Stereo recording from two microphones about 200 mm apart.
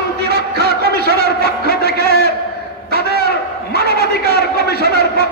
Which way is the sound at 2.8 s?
50° right (ahead or behind).